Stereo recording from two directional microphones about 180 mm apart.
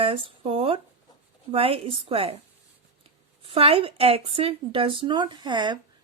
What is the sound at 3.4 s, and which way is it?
Speech, 30° right (ahead or behind).